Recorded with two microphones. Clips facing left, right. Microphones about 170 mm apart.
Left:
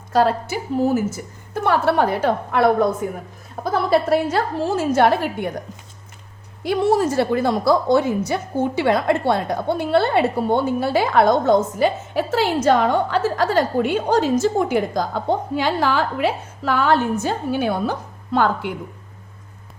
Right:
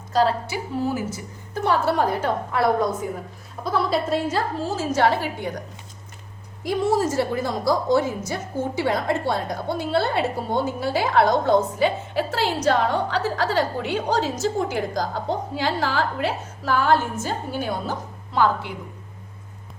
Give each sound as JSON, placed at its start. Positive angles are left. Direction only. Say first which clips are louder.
{"t": 0.1, "sound": "a woman's voice", "louder": "left 3 dB", "side_deg": 55}
{"t": 1.6, "sound": "a woman's voice", "louder": "left 3 dB", "side_deg": 60}
{"t": 6.7, "sound": "a woman's voice", "louder": "left 3 dB", "side_deg": 65}